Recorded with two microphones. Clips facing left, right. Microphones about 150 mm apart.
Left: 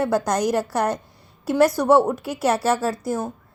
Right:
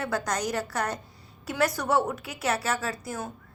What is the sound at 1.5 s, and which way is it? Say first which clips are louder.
A woman's voice: left 9 dB; 35° left (ahead or behind).